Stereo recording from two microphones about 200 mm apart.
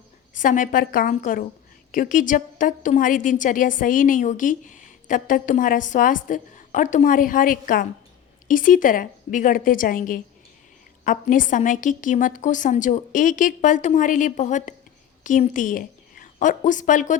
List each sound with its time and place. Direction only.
0.3 s a woman's voice: 40° left (ahead or behind)